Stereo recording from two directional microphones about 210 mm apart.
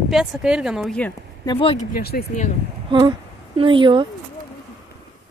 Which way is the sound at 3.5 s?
25° right (ahead or behind).